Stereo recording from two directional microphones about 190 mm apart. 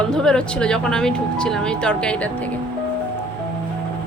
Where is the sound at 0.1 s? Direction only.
5° left (ahead or behind).